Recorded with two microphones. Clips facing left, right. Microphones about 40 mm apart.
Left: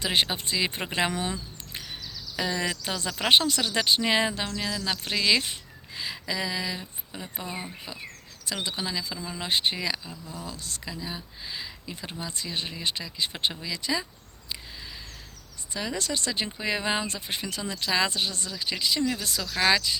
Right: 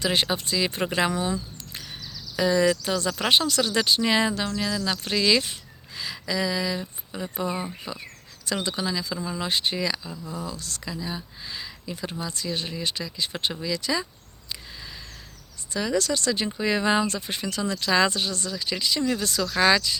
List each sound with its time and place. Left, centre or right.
0.0 s speech: centre
1.1 s speech: left
2.3 s speech: centre
6.0 s a sound: centre
7.1 s speech: centre
12.2 s speech: centre
15.7 s speech: centre